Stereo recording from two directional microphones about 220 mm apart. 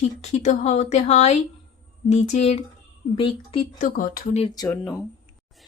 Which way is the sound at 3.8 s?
40° left (ahead or behind).